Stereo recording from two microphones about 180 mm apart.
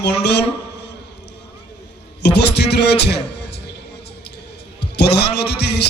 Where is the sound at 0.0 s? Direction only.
70° left (ahead or behind).